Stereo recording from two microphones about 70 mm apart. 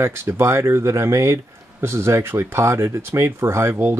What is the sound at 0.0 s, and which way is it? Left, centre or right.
Speech, right.